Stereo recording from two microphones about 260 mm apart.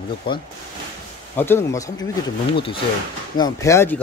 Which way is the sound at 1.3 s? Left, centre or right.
Centre.